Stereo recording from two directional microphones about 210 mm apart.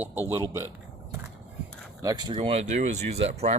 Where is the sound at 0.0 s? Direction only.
10° right (ahead or behind).